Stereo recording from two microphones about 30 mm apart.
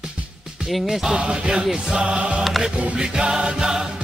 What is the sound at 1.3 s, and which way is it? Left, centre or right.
Music, right.